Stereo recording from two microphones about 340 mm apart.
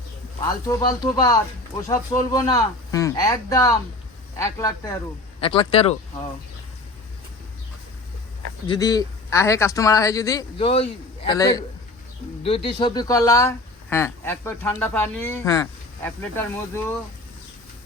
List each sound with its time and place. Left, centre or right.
0.4 s speech: centre
8.6 s speech: centre